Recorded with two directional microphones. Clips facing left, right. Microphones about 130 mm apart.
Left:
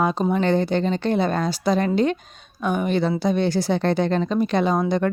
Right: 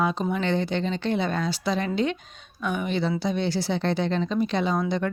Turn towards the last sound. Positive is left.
turn(degrees=50)  # may be behind; listen again after turning